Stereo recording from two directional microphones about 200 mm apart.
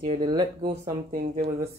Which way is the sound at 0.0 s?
25° right (ahead or behind).